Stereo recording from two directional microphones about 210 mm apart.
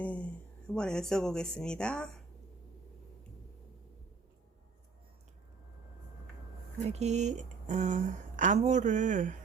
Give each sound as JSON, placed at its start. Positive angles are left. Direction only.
{"t": 0.0, "sound": "a sound", "side_deg": 5}
{"t": 0.7, "sound": "speech", "side_deg": 5}
{"t": 6.8, "sound": "speech", "side_deg": -30}